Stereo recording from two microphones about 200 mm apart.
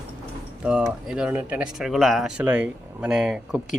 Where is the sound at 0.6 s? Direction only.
5° right (ahead or behind).